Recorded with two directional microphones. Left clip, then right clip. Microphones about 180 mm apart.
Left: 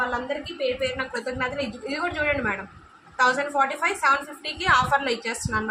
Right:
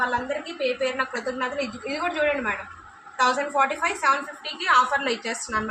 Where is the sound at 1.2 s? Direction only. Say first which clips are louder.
Even; 15° left (ahead or behind).